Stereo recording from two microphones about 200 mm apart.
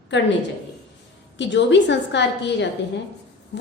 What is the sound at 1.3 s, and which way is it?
A woman's voice, 65° left (ahead or behind).